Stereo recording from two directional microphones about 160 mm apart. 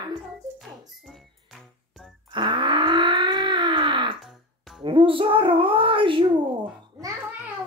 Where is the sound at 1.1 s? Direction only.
Centre (ahead or behind).